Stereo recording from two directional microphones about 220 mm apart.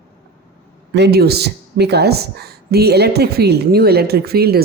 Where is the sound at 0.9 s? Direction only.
50° right (ahead or behind).